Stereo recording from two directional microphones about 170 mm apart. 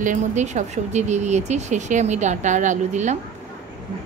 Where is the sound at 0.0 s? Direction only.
45° right (ahead or behind).